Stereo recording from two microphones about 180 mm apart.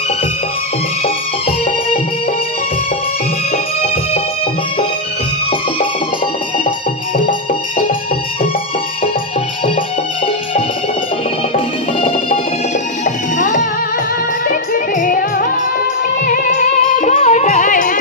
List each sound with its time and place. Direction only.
11.5 s music: 30° left (ahead or behind)
13.1 s music: 45° left (ahead or behind)